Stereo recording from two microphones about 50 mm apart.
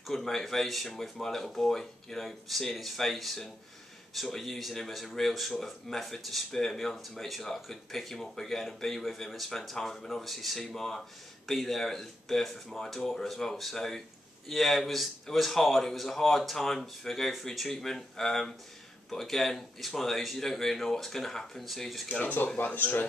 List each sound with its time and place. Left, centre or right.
0.0 s speech: centre
22.2 s speech: left